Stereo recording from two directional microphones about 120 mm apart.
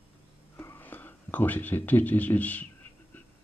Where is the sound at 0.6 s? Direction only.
20° left (ahead or behind).